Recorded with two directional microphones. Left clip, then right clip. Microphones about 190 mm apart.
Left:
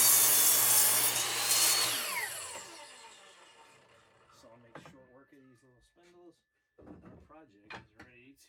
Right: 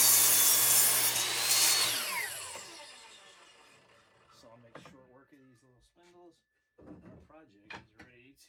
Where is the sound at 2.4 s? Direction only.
15° left (ahead or behind).